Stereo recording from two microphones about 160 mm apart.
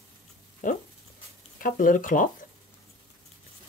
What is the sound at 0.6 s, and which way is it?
Speech, 55° left (ahead or behind).